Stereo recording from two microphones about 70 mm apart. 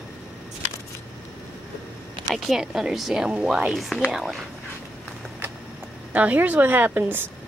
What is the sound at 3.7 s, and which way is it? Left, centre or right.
Speech, centre.